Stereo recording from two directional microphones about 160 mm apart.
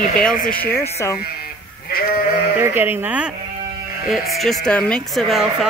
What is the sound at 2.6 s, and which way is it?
Speech, 15° right (ahead or behind).